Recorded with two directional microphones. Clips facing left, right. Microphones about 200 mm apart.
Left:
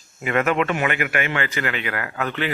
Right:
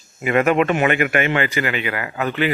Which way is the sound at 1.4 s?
10° right (ahead or behind).